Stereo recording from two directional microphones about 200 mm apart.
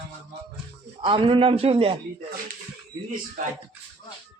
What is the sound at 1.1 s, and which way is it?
Speech, 25° right (ahead or behind).